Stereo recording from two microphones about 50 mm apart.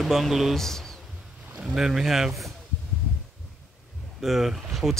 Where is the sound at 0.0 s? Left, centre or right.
Centre.